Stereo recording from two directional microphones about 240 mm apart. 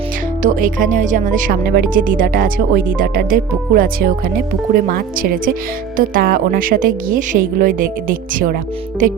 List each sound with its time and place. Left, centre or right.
0.4 s speech: right